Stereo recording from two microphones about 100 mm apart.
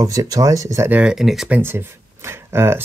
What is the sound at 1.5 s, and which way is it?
Speech, 20° right (ahead or behind).